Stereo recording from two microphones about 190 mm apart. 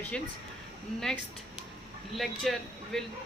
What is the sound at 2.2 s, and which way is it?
Speech, centre (ahead or behind).